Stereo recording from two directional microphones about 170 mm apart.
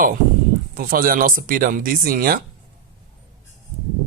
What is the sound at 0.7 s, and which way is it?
Speech, 55° right (ahead or behind).